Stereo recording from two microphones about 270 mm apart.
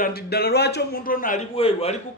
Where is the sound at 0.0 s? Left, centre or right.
Left.